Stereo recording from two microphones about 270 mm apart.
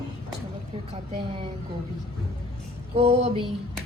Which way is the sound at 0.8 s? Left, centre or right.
Right.